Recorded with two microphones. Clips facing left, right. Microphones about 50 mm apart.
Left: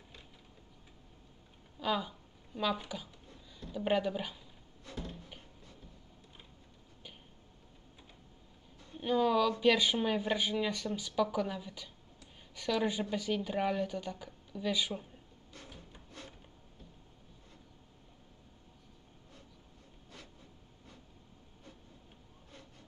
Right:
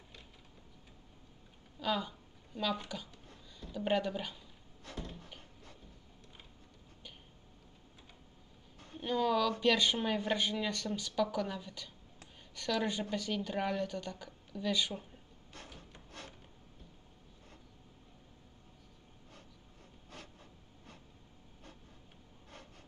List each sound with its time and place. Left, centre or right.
1.8 s a woman's voice: centre
9.0 s a woman's voice: centre
15.5 s wood: right